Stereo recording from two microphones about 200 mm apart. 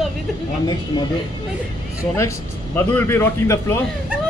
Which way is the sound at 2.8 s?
10° left (ahead or behind).